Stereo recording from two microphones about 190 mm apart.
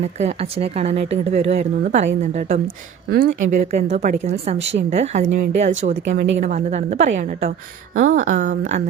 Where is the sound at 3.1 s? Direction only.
55° right (ahead or behind).